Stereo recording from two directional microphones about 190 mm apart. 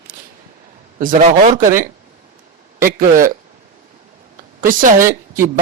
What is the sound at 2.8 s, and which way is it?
Speech, 45° right (ahead or behind).